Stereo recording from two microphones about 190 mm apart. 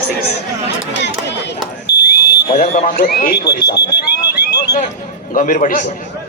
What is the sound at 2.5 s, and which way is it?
Speech, 35° left (ahead or behind).